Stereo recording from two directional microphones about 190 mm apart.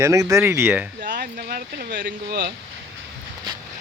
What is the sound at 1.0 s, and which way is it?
Speech, 50° right (ahead or behind).